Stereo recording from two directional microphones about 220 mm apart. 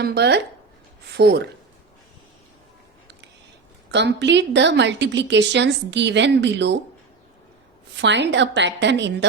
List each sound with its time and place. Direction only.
0.0 s a woman's voice: 50° right (ahead or behind)
3.9 s a woman's voice: 50° right (ahead or behind)
8.0 s a woman's voice: 55° right (ahead or behind)